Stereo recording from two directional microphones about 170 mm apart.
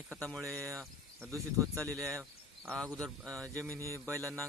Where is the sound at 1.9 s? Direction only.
5° left (ahead or behind).